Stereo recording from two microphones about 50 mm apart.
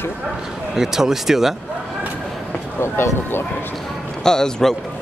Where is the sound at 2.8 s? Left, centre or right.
Left.